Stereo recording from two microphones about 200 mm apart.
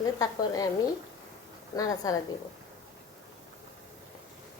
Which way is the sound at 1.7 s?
15° left (ahead or behind).